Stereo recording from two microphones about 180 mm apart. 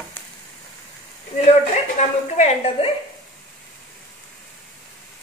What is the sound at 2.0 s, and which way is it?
Speech, 40° left (ahead or behind).